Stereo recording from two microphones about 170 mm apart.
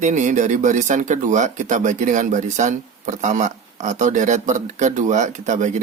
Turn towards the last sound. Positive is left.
turn(degrees=-45)  # may be behind; listen again after turning